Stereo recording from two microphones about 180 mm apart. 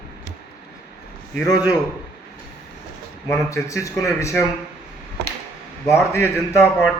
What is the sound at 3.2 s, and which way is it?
A man's voice, 15° left (ahead or behind).